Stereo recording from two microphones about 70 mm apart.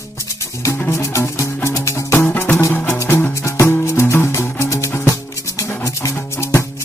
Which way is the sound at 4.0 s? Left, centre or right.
Left.